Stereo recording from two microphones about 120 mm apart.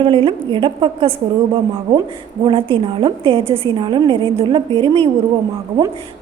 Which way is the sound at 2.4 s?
45° right (ahead or behind).